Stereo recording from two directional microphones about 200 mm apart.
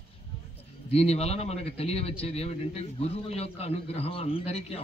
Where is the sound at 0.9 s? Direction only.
30° left (ahead or behind).